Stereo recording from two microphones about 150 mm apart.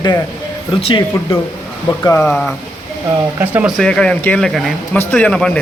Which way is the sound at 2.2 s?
5° left (ahead or behind).